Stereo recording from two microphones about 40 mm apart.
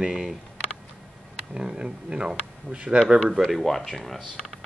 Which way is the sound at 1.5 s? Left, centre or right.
Right.